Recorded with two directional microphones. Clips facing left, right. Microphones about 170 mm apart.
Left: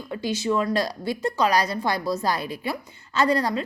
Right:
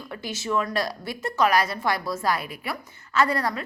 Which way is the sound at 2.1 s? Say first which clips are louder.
Left 1 dB; 35° left (ahead or behind).